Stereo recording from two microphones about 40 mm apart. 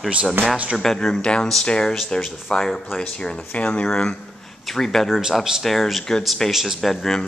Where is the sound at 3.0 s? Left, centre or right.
Left.